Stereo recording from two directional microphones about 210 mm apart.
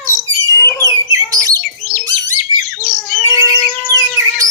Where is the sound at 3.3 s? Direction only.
15° right (ahead or behind).